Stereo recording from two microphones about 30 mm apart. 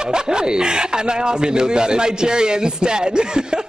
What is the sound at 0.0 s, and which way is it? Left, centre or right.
Speech, right.